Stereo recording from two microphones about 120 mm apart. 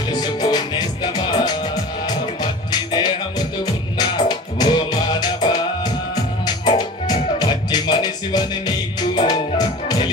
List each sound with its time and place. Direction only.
0.1 s music: 35° left (ahead or behind)
2.9 s music: 35° left (ahead or behind)